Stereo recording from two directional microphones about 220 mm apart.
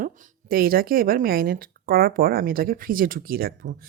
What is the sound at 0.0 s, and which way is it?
A woman's voice, 40° right (ahead or behind).